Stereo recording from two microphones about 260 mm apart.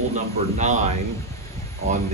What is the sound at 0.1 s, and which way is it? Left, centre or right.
Speech, right.